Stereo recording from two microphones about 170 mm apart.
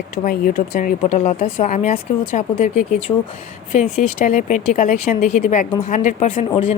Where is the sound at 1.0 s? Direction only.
40° left (ahead or behind).